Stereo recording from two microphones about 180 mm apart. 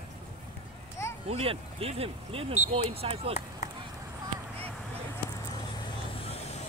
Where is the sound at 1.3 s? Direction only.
30° right (ahead or behind).